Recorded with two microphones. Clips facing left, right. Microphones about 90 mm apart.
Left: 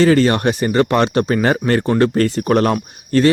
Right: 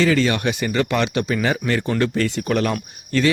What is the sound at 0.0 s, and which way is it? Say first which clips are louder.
Speech: left 5 dB; 40° left (ahead or behind).